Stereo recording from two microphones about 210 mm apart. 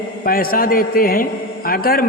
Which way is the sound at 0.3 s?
45° left (ahead or behind).